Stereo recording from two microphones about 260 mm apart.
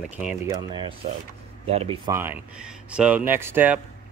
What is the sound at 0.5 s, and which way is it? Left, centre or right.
Speech, centre.